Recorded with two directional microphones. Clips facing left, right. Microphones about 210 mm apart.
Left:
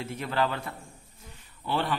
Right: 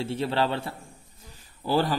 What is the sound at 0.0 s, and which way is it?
A man's voice, 30° right (ahead or behind).